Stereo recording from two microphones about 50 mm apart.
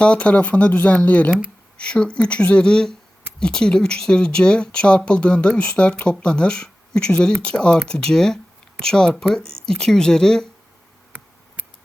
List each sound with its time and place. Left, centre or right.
0.0 s speech: left
1.8 s speech: centre
2.6 s speech: centre